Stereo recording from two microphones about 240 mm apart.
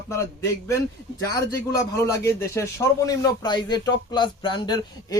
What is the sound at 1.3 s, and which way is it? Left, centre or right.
A man's voice, centre.